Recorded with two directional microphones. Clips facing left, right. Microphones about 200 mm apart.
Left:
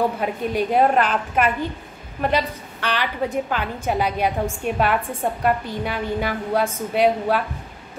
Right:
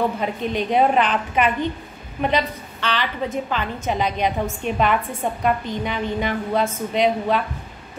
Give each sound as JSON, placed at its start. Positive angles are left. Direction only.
{"t": 0.0, "sound": "a woman's voice", "side_deg": 10}